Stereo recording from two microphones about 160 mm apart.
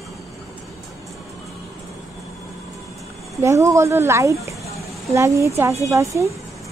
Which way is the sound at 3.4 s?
20° right (ahead or behind).